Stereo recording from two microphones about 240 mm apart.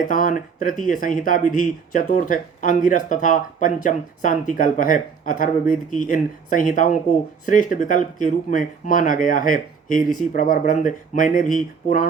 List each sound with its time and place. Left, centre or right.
0.1 s speech: left